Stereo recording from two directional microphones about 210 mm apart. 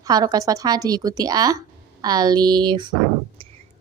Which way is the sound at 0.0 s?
20° right (ahead or behind).